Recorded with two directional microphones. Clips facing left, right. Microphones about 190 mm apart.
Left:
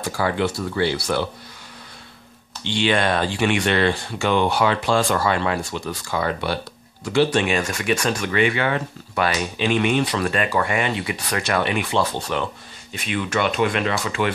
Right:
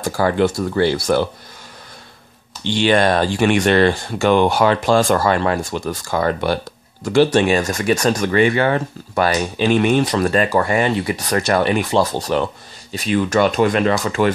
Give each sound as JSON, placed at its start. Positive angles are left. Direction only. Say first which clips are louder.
{"t": 0.0, "sound": "speech", "louder": "right 5 dB", "side_deg": -45}
{"t": 2.7, "sound": "speech", "louder": "right 5 dB", "side_deg": -40}